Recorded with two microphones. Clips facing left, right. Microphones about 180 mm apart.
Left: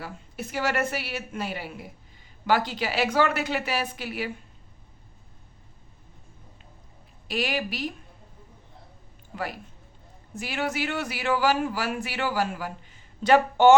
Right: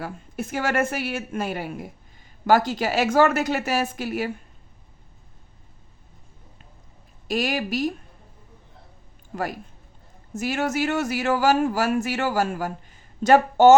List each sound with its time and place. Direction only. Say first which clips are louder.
0.0 s a man's voice: right 5 dB; 50° right (ahead or behind)
7.3 s a man's voice: right 4 dB; 45° right (ahead or behind)
9.3 s a man's voice: right 4 dB; 45° right (ahead or behind)